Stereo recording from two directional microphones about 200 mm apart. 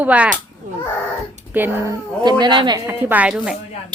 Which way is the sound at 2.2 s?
20° right (ahead or behind).